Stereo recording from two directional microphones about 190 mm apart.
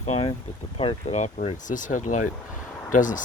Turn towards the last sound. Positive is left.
turn(degrees=45)  # may be behind; listen again after turning